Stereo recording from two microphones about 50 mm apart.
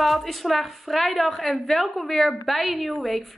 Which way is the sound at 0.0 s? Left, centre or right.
Centre.